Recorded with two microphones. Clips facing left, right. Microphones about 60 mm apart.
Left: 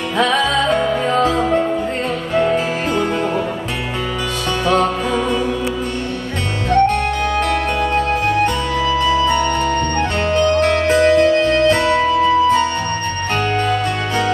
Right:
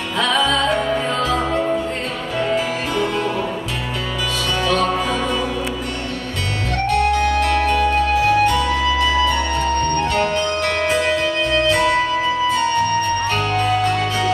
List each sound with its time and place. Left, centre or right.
0.7 s music: left
6.7 s music: left
9.9 s music: left
13.4 s music: left